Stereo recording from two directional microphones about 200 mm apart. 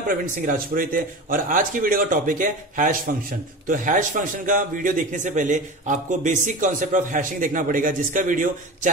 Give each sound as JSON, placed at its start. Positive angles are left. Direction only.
{"t": 0.1, "sound": "a man's voice", "side_deg": -45}